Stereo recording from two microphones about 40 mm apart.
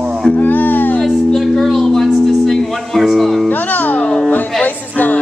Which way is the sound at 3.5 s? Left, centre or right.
Left.